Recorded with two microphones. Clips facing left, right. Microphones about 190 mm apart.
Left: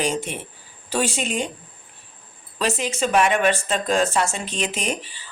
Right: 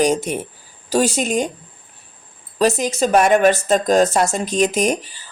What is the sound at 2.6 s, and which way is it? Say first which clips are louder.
Speech: right 6 dB; 40° right (ahead or behind).